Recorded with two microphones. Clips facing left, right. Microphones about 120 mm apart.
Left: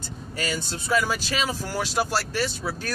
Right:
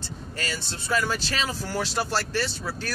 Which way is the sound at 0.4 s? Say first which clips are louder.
Left 4 dB; 10° left (ahead or behind).